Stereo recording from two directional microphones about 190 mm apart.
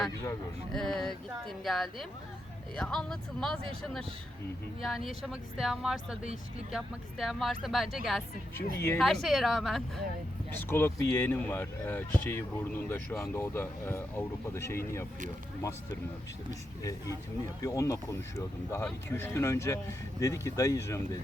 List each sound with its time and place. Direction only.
0.7 s speech: centre (ahead or behind)
10.6 s speech: 10° left (ahead or behind)
17.6 s speech: 15° left (ahead or behind)